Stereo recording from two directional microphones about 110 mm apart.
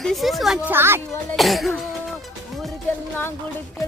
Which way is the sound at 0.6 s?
20° right (ahead or behind).